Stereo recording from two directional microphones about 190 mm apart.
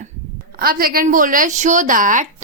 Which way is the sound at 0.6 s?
50° right (ahead or behind).